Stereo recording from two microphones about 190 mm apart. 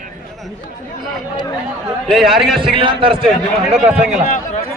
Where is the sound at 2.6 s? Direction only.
25° right (ahead or behind).